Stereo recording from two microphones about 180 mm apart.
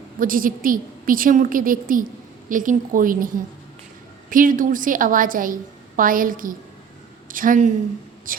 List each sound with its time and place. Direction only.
0.2 s a woman's voice: 50° right (ahead or behind)